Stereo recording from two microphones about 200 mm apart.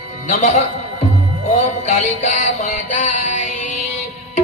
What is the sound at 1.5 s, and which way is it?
Music, 35° left (ahead or behind).